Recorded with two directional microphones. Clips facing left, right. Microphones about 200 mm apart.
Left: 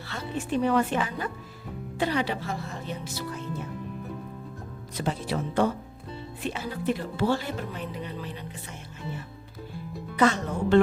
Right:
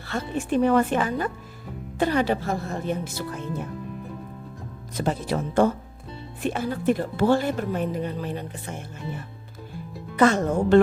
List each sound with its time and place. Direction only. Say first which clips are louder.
0.1 s speech: right 5 dB; 50° right (ahead or behind)
4.9 s speech: right 4 dB; 45° right (ahead or behind)
10.2 s speech: right 4 dB; 50° right (ahead or behind)